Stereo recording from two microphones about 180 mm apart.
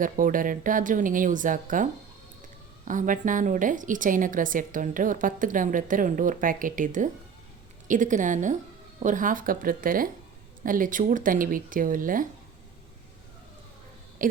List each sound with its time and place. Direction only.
0.0 s a woman's voice: 50° right (ahead or behind)
14.2 s speech: 50° right (ahead or behind)